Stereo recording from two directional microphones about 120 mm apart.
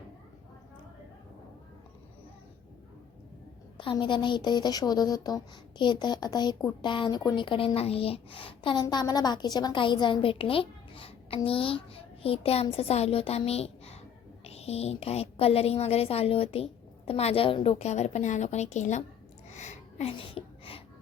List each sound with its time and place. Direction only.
3.9 s a woman's voice: 40° left (ahead or behind)
8.7 s a woman's voice: 35° left (ahead or behind); by 19.0 s 80° left
19.5 s a sound: 75° left (ahead or behind); by 20.8 s 50° left (ahead or behind)